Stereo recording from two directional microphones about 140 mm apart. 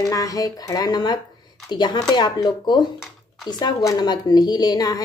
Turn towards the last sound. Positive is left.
turn(degrees=30)  # may be behind; listen again after turning